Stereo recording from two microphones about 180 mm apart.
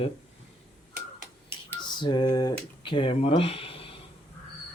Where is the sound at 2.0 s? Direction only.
25° left (ahead or behind).